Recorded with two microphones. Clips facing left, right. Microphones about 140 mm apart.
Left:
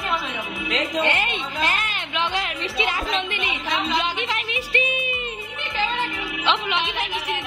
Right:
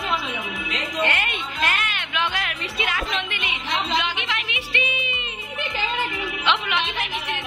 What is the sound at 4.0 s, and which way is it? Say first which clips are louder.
Music: left 2 dB; 35° left (ahead or behind).